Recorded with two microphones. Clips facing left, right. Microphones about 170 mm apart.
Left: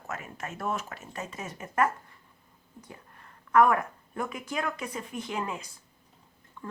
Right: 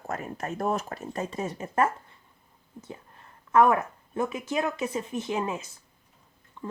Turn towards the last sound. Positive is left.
turn(degrees=-25)  # may be behind; listen again after turning